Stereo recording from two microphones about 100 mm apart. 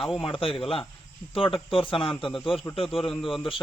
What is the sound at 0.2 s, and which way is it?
A man's voice, 60° left (ahead or behind).